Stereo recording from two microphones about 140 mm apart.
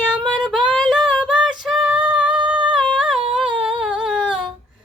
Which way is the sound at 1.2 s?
5° right (ahead or behind).